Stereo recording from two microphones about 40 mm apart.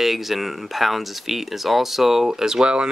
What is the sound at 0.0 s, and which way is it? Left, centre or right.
Speech, centre.